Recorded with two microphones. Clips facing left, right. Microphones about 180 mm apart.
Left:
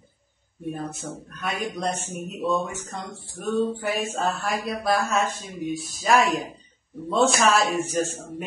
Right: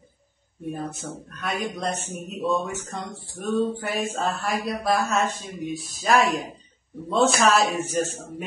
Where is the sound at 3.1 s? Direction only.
25° right (ahead or behind).